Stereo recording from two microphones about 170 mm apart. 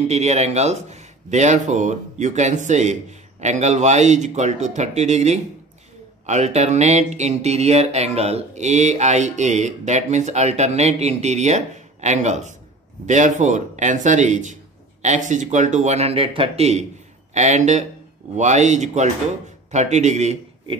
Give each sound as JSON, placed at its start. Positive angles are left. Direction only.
{"t": 0.1, "sound": "speech", "side_deg": -40}
{"t": 6.2, "sound": "music", "side_deg": -40}
{"t": 13.0, "sound": "a man's voice", "side_deg": -45}